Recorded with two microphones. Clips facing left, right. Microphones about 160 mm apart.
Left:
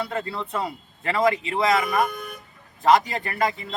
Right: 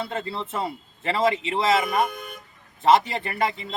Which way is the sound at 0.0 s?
25° right (ahead or behind).